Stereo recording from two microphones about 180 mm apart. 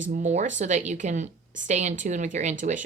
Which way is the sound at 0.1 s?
40° right (ahead or behind).